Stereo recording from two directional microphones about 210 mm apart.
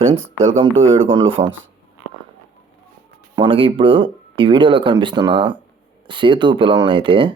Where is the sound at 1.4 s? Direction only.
30° right (ahead or behind).